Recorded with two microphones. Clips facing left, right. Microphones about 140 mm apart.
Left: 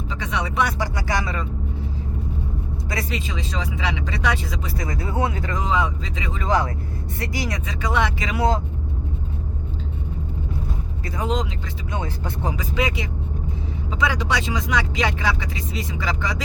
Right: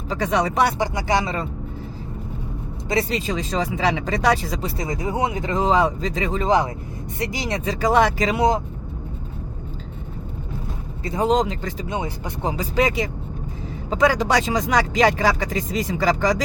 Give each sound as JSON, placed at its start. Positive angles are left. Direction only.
{"t": 0.1, "sound": "speech", "side_deg": -40}
{"t": 0.8, "sound": "speech", "side_deg": -20}
{"t": 2.9, "sound": "speech", "side_deg": -25}
{"t": 3.2, "sound": "speech", "side_deg": -40}
{"t": 4.8, "sound": "speech", "side_deg": -20}
{"t": 5.6, "sound": "speech", "side_deg": -35}
{"t": 7.2, "sound": "speech", "side_deg": -20}
{"t": 8.4, "sound": "speech", "side_deg": -15}
{"t": 11.0, "sound": "speech", "side_deg": -25}
{"t": 11.3, "sound": "speech", "side_deg": -40}
{"t": 11.9, "sound": "speech", "side_deg": -15}
{"t": 12.5, "sound": "speech", "side_deg": -35}